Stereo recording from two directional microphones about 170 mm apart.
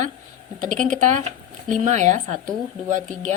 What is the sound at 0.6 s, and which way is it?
A woman's voice, 45° right (ahead or behind).